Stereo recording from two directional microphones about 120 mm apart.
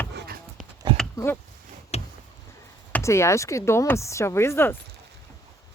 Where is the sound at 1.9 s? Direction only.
60° left (ahead or behind).